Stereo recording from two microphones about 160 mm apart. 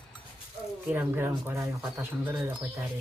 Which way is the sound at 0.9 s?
15° right (ahead or behind).